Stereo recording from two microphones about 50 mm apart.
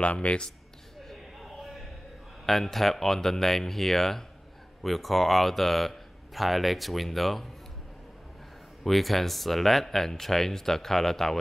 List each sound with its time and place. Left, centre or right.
0.0 s speech: left
1.0 s a sound: centre
2.4 s speech: centre
8.8 s speech: centre